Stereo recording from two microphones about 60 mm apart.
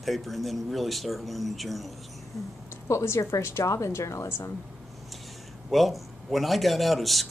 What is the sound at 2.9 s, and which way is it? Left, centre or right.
A woman's voice, left.